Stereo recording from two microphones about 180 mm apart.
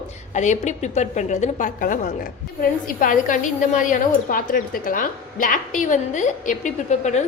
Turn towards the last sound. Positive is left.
turn(degrees=40)  # may be behind; listen again after turning